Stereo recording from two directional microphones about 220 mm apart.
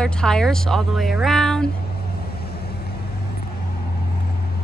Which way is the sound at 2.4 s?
45° left (ahead or behind).